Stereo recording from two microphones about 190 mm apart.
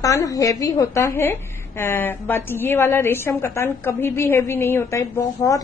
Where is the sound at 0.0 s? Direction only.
15° left (ahead or behind).